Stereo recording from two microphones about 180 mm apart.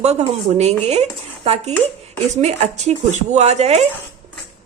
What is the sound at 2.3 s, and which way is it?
Speech, 40° right (ahead or behind).